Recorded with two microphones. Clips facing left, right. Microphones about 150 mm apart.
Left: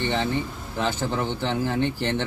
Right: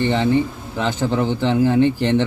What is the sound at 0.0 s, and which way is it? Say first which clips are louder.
A man's voice: right 8 dB; 10° right (ahead or behind).